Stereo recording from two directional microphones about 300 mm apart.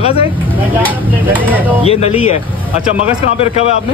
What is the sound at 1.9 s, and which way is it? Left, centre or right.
Speech, centre.